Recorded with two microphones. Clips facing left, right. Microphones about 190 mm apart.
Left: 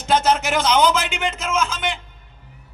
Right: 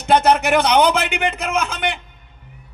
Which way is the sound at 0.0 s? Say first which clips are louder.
Right 4 dB; 60° right (ahead or behind).